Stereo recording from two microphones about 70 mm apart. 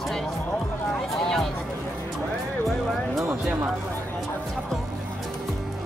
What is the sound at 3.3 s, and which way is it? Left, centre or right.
Speech, right.